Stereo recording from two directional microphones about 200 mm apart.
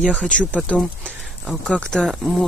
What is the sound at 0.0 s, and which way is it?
Speech, 5° left (ahead or behind).